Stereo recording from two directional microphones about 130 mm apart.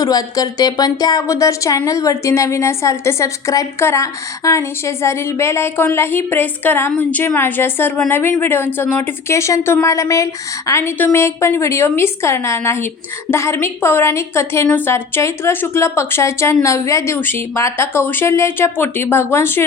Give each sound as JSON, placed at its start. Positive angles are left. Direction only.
{"t": 0.0, "sound": "speech", "side_deg": 30}